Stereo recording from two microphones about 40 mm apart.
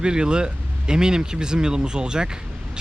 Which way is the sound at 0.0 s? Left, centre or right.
Right.